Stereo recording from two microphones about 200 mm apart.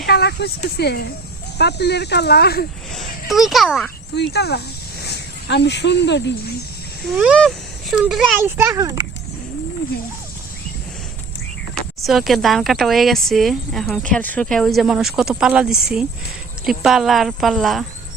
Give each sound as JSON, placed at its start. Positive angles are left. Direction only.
{"t": 0.0, "sound": "speech", "side_deg": 55}
{"t": 2.9, "sound": "speech", "side_deg": 0}
{"t": 4.1, "sound": "speech", "side_deg": 55}
{"t": 7.1, "sound": "a child's voice", "side_deg": -5}
{"t": 11.7, "sound": "speech", "side_deg": 0}